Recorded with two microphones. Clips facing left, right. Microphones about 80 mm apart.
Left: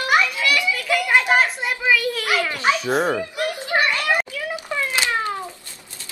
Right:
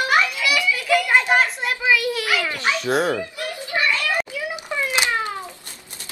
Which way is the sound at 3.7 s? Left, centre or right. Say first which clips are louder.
Left 3 dB; left.